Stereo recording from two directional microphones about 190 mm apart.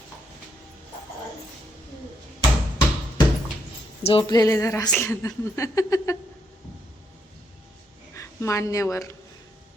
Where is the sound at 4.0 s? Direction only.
30° left (ahead or behind).